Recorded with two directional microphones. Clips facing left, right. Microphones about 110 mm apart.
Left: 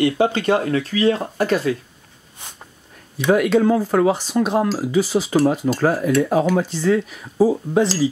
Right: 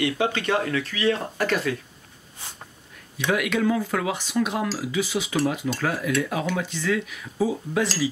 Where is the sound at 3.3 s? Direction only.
35° left (ahead or behind).